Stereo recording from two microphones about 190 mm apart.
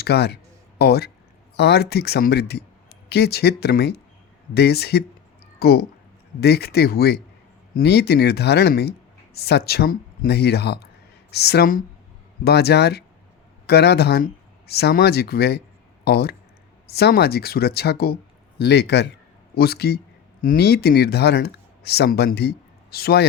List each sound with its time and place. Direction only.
0.0 s speech: 60° left (ahead or behind)